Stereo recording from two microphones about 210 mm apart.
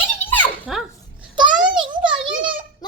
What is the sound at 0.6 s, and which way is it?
Dog, 5° right (ahead or behind).